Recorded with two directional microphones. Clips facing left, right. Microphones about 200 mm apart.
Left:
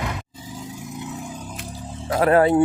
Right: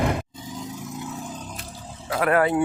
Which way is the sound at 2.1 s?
30° left (ahead or behind).